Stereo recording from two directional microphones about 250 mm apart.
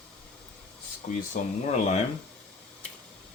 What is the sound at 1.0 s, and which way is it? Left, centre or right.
Speech, left.